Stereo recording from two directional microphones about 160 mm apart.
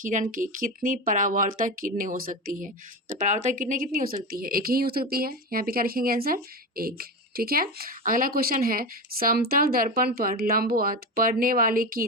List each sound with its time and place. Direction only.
0.0 s speech: 55° right (ahead or behind)
3.1 s speech: 50° right (ahead or behind)